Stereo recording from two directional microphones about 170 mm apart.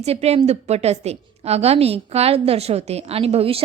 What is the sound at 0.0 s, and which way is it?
A woman's voice, 40° right (ahead or behind).